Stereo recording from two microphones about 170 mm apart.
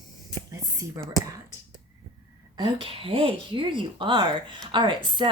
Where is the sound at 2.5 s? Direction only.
30° right (ahead or behind).